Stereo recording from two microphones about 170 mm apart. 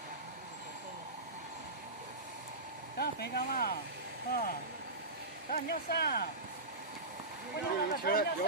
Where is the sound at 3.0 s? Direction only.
70° left (ahead or behind).